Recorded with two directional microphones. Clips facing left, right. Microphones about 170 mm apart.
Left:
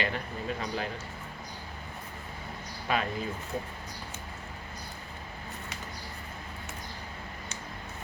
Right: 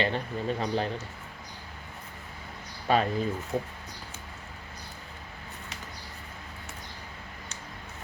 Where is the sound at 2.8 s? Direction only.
35° right (ahead or behind).